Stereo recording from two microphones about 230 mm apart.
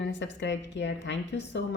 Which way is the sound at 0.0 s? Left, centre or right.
Left.